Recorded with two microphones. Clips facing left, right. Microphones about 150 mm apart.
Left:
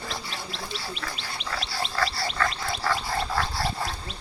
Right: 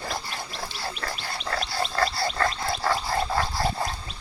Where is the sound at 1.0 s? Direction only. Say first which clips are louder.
Right 3 dB; 45° right (ahead or behind).